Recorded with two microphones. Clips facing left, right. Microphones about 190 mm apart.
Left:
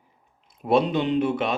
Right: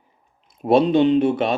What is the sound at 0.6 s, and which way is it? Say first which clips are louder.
Speech: right 6 dB; 30° right (ahead or behind).